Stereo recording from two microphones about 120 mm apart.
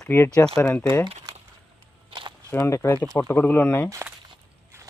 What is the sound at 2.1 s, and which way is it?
Walk, 40° right (ahead or behind).